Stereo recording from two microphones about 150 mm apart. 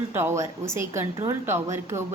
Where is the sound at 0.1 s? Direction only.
15° right (ahead or behind).